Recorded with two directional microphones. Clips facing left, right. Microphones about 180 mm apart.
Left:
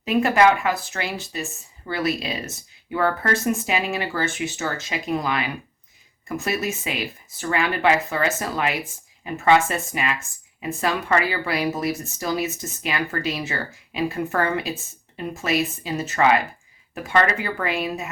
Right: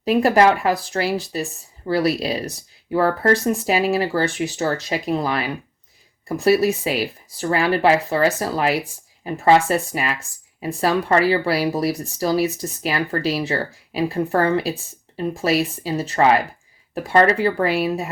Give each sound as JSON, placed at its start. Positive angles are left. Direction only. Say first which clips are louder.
{"t": 0.0, "sound": "speech", "louder": "right 2 dB", "side_deg": -35}